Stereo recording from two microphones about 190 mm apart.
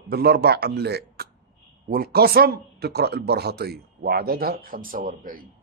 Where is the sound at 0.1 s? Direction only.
55° right (ahead or behind).